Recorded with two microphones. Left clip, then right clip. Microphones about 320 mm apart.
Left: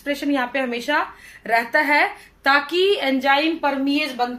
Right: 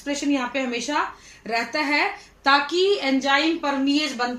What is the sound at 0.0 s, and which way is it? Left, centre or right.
A woman's voice, left.